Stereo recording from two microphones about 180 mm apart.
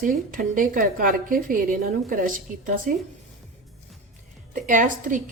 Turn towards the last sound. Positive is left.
turn(degrees=-45)  # may be behind; listen again after turning